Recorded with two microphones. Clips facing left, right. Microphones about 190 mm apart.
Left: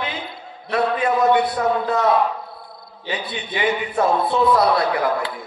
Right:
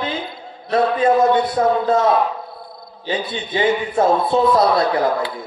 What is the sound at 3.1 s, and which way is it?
A man's voice, 25° right (ahead or behind).